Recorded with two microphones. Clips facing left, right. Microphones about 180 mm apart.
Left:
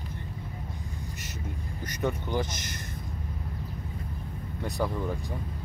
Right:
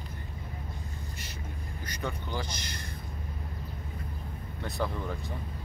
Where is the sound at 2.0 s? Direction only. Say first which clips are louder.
Left 6 dB; 20° left (ahead or behind).